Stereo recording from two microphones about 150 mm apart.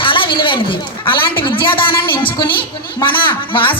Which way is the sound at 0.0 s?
35° left (ahead or behind).